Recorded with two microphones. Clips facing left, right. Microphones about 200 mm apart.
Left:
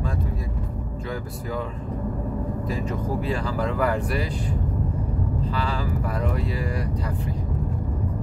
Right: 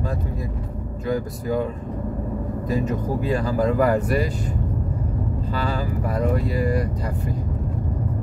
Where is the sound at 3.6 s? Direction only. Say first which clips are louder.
Right 5 dB; 45° right (ahead or behind).